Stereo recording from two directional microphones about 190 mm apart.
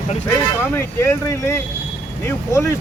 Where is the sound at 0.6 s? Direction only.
10° left (ahead or behind).